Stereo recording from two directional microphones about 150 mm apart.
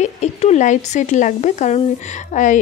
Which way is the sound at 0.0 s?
50° left (ahead or behind).